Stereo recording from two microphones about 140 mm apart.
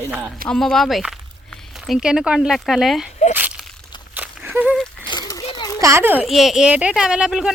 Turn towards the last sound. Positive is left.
turn(degrees=-5)  # may be behind; listen again after turning